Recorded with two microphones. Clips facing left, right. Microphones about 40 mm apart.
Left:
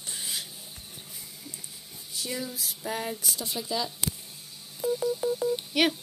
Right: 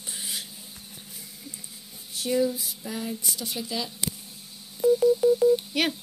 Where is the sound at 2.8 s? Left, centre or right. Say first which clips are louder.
Left 2 dB; left.